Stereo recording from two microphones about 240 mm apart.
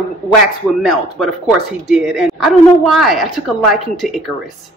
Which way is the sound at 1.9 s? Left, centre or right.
Centre.